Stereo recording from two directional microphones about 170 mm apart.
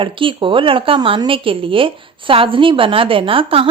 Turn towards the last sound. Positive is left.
turn(degrees=-35)  # may be behind; listen again after turning